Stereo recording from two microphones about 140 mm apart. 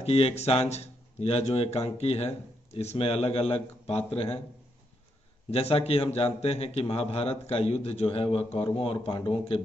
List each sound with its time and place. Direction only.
0.0 s speech: 45° left (ahead or behind)
5.5 s speech: 45° left (ahead or behind)